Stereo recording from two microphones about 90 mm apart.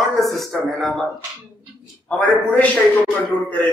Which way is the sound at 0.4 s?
Centre (ahead or behind).